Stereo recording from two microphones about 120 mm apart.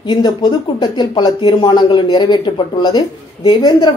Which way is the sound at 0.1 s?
35° left (ahead or behind).